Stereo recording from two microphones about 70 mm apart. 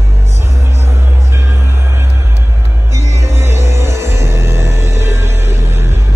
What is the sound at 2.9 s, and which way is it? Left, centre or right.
Music, right.